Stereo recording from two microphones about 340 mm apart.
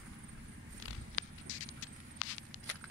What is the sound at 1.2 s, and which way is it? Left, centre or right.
Clip-clop, left.